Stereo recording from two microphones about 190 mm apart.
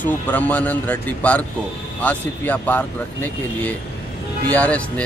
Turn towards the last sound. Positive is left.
turn(degrees=5)  # may be behind; listen again after turning